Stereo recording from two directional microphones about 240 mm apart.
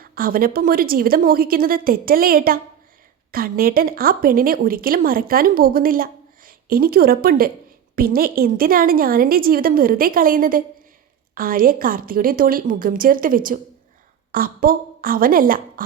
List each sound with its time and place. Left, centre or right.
0.0 s speech: right